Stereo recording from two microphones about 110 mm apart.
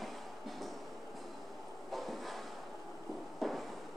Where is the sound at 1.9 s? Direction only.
Centre (ahead or behind).